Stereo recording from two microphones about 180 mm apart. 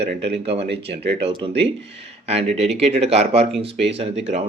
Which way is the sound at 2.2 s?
35° right (ahead or behind).